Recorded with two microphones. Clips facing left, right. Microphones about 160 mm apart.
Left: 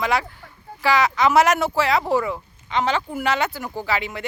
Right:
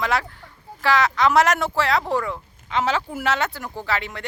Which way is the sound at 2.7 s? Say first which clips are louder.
Left 1 dB; 5° right (ahead or behind).